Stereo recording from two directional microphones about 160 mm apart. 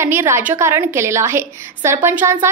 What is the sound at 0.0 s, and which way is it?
A woman's voice, 15° right (ahead or behind).